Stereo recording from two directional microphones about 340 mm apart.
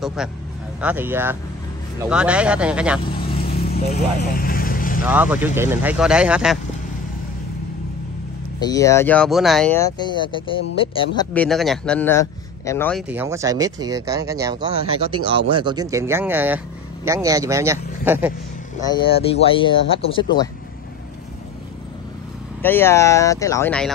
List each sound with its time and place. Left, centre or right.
0.0 s a man's voice: centre
3.5 s vehicle: left
5.0 s speech: centre
8.5 s speech: centre
11.3 s speech: centre
13.1 s speech: centre
18.8 s speech: centre
22.6 s speech: centre